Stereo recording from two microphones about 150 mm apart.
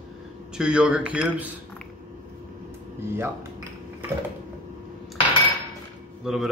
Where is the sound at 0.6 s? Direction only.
5° right (ahead or behind).